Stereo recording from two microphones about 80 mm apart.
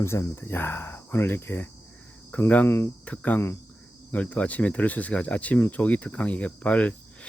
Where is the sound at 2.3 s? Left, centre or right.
Centre.